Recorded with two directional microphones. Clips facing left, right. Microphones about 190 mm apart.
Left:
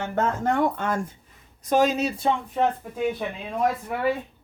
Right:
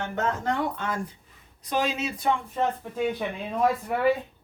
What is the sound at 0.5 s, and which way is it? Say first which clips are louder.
Speech: left 5 dB; 50° left (ahead or behind).